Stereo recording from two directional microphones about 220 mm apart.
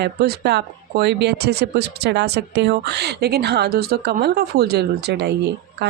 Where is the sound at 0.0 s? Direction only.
45° right (ahead or behind).